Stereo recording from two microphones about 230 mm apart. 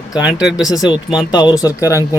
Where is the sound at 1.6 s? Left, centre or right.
Centre.